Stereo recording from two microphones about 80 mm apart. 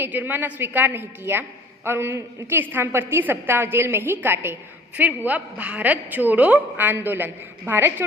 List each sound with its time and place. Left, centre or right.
0.0 s a woman's voice: right